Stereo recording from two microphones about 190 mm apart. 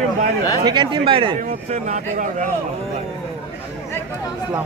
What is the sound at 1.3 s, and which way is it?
Speech, 45° right (ahead or behind).